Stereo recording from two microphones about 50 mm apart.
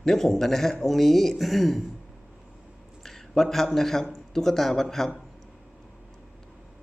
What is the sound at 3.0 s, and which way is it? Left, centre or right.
A man's voice, centre.